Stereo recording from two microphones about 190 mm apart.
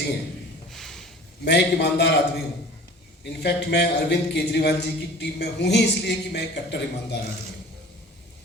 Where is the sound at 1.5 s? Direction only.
60° left (ahead or behind).